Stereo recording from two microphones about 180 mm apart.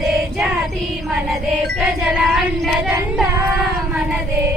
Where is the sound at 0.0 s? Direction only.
Centre (ahead or behind).